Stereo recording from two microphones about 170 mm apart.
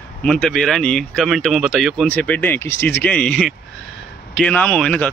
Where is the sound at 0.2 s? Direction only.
5° left (ahead or behind).